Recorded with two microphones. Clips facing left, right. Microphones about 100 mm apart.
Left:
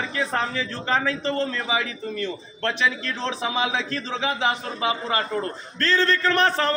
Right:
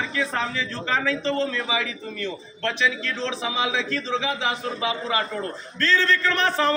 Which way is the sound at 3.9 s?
45° left (ahead or behind).